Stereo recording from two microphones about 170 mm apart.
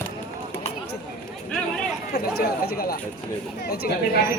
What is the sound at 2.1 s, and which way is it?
Speech, 65° left (ahead or behind).